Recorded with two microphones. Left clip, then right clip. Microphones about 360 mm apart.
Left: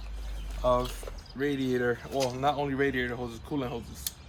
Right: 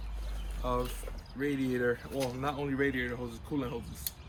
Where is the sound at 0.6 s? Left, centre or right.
Centre.